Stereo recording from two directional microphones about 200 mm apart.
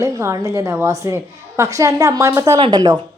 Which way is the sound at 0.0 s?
15° right (ahead or behind).